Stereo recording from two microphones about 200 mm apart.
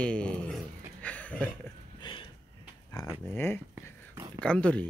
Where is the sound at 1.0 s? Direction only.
5° left (ahead or behind).